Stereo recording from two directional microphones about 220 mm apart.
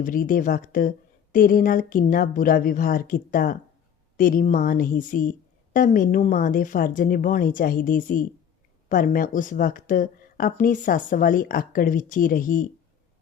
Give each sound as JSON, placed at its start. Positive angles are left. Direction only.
{"t": 0.0, "sound": "a woman's voice", "side_deg": 40}